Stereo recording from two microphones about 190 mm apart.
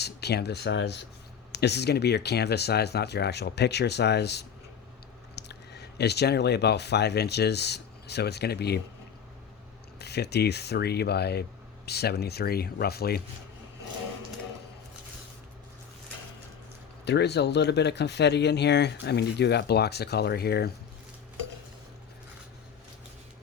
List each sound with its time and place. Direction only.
0.0 s speech: 60° left (ahead or behind)
10.0 s speech: 60° left (ahead or behind)
17.1 s speech: 60° left (ahead or behind)